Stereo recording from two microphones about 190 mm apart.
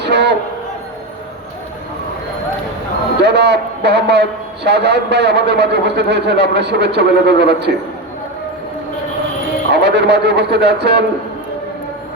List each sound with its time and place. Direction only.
0.0 s a sound: 60° right (ahead or behind)
3.2 s a man's voice: 60° right (ahead or behind)
9.7 s a man's voice: 60° right (ahead or behind)